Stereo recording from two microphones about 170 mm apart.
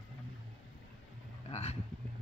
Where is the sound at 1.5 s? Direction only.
35° left (ahead or behind).